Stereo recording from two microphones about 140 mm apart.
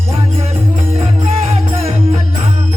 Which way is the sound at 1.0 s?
45° right (ahead or behind).